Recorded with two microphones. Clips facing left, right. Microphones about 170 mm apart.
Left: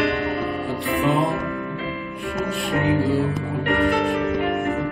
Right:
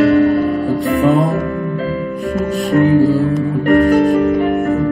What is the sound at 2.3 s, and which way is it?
Music, 45° right (ahead or behind).